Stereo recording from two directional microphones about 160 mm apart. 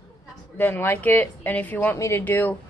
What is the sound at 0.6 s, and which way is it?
Speech, 15° left (ahead or behind).